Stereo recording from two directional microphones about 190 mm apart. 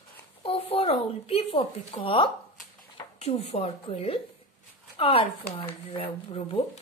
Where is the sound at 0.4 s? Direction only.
30° left (ahead or behind).